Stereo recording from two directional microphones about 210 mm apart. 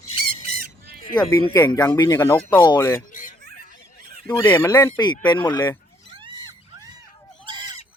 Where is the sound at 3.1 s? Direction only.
40° left (ahead or behind).